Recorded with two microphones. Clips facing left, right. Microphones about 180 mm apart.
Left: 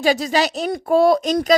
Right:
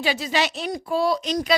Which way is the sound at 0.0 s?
40° left (ahead or behind).